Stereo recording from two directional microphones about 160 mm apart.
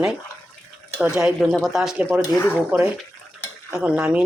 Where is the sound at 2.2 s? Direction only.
15° left (ahead or behind).